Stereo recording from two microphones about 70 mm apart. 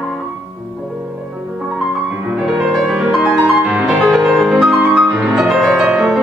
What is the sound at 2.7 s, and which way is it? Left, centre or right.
Music, centre.